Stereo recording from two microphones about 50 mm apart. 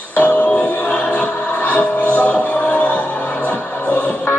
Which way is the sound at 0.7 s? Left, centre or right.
Left.